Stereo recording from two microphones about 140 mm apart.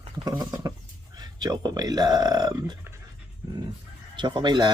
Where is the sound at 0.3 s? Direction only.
30° right (ahead or behind).